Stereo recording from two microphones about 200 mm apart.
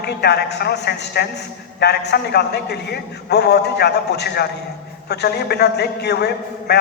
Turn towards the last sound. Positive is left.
turn(degrees=55)  # may be behind; listen again after turning